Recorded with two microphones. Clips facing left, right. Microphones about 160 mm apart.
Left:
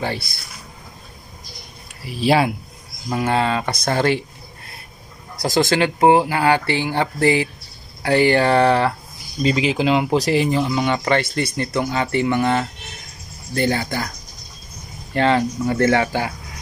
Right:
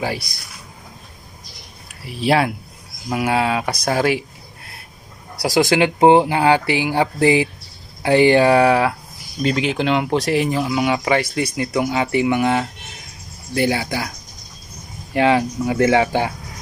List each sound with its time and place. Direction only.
0.0 s speech: 10° right (ahead or behind)
2.0 s speech: centre (ahead or behind)
5.4 s speech: 15° right (ahead or behind)
15.1 s speech: 10° right (ahead or behind)